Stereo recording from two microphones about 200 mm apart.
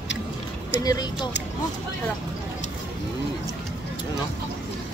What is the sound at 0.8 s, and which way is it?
Speech, 20° left (ahead or behind).